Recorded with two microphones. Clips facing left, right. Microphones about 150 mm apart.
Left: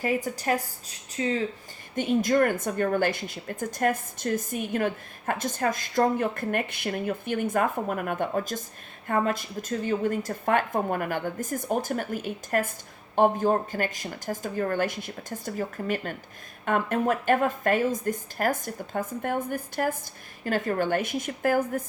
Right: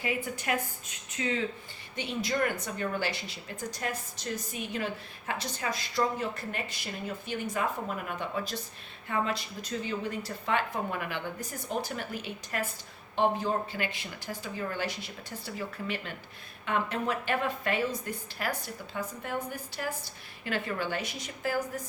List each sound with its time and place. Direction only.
0.0 s speech: 40° left (ahead or behind)
2.0 s a woman's voice: 50° left (ahead or behind)